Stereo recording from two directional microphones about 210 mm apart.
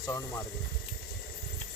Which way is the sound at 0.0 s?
15° left (ahead or behind).